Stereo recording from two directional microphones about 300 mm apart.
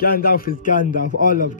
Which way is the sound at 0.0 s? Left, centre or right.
Left.